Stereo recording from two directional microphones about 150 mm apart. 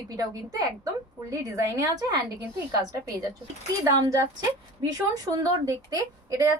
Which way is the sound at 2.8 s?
25° right (ahead or behind).